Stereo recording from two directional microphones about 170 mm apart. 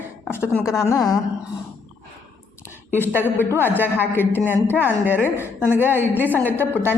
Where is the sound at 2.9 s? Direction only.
10° left (ahead or behind).